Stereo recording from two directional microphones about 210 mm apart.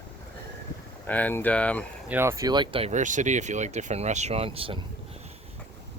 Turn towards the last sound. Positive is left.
turn(degrees=-25)  # may be behind; listen again after turning